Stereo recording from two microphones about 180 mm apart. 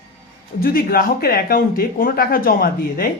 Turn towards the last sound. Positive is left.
turn(degrees=55)  # may be behind; listen again after turning